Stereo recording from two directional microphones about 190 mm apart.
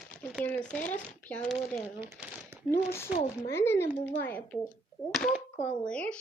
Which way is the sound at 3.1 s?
40° left (ahead or behind).